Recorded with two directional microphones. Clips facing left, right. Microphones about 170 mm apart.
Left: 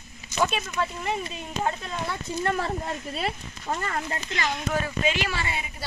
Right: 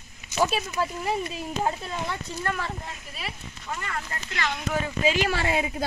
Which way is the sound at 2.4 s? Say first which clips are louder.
Left 5 dB; 35° left (ahead or behind).